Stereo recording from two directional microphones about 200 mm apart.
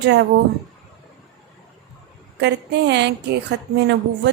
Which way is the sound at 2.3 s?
60° right (ahead or behind).